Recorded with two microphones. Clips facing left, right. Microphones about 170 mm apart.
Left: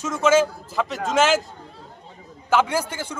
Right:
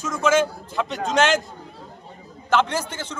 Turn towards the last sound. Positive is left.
turn(degrees=10)  # may be behind; listen again after turning